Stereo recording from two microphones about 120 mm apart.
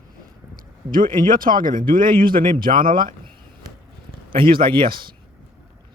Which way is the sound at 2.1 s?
40° right (ahead or behind).